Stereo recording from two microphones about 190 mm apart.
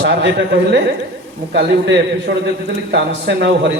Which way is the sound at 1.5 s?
65° right (ahead or behind).